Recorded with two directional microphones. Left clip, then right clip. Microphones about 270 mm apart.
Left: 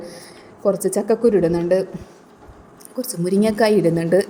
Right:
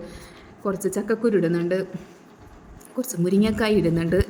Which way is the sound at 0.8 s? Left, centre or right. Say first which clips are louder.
Left 5 dB; right.